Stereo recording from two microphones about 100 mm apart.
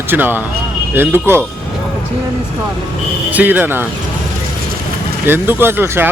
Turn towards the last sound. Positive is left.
turn(degrees=-20)  # may be behind; listen again after turning